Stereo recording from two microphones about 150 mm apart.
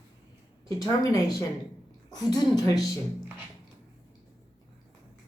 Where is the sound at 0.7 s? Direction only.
25° left (ahead or behind).